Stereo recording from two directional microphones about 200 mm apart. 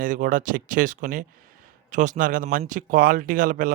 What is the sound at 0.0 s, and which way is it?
A man's voice, 40° right (ahead or behind).